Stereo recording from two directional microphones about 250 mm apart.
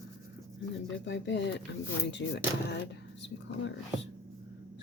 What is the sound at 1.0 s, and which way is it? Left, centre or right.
Speech, left.